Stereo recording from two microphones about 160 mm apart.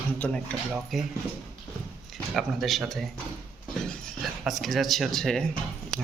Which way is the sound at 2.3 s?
Centre (ahead or behind).